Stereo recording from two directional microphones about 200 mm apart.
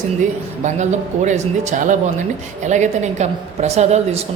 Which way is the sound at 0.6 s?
35° right (ahead or behind).